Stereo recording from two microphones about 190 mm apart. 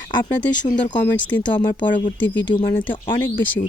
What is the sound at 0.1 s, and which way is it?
Speech, 20° left (ahead or behind).